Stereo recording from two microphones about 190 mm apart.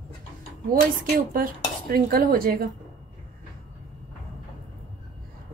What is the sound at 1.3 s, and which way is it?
A woman's voice, 50° right (ahead or behind).